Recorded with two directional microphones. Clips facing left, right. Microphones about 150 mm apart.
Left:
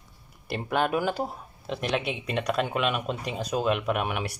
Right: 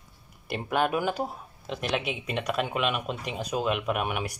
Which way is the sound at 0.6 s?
5° right (ahead or behind).